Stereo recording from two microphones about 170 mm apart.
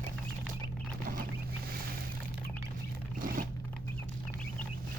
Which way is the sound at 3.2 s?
55° right (ahead or behind).